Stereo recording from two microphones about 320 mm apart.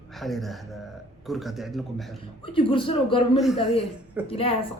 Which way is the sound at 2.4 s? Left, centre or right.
Centre.